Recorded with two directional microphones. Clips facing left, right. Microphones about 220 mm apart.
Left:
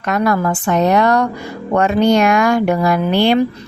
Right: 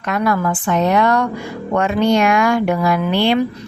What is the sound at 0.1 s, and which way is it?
A woman's voice, 40° left (ahead or behind).